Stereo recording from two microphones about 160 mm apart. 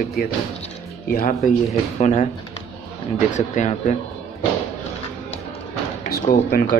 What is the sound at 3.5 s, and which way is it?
Speech, 45° left (ahead or behind).